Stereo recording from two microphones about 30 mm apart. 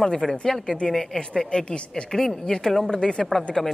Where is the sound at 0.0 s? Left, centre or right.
Centre.